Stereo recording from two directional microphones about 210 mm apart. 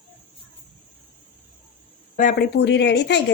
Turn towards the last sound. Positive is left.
turn(degrees=55)  # may be behind; listen again after turning